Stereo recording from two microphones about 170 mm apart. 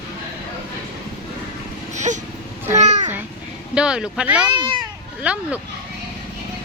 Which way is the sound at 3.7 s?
5° right (ahead or behind).